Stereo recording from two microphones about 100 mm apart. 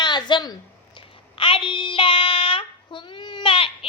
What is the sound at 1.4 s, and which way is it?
Child singing, 60° left (ahead or behind).